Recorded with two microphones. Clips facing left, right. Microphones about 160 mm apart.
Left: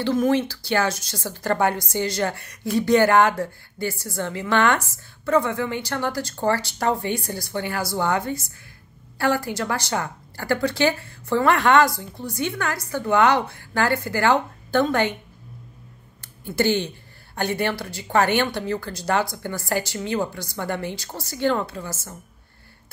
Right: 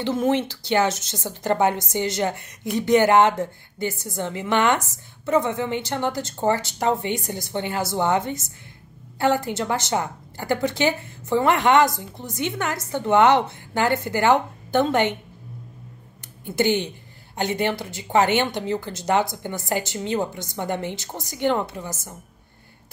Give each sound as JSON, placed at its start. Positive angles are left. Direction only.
{"t": 0.0, "sound": "a woman's voice", "side_deg": -25}
{"t": 16.4, "sound": "a woman's voice", "side_deg": -20}